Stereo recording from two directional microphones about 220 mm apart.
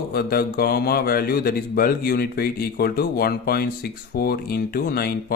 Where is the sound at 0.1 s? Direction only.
45° left (ahead or behind).